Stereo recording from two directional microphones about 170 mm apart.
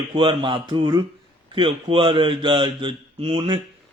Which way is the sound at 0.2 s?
30° right (ahead or behind).